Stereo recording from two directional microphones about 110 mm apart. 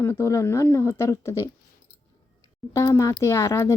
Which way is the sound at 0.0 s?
25° left (ahead or behind).